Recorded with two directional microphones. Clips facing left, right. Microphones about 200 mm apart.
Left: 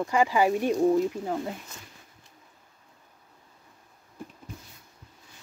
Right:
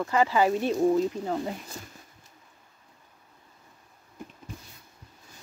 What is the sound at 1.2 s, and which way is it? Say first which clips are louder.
Speech: right 1 dB; 5° left (ahead or behind).